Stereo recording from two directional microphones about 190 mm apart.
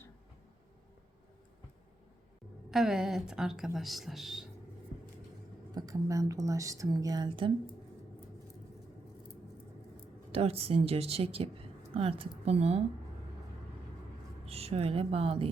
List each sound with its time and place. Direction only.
2.6 s a woman's voice: centre (ahead or behind)
5.7 s speech: 20° right (ahead or behind)
10.3 s speech: 30° right (ahead or behind)
14.4 s speech: 30° right (ahead or behind)